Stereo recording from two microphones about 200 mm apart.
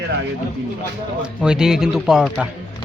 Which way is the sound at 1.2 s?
5° right (ahead or behind).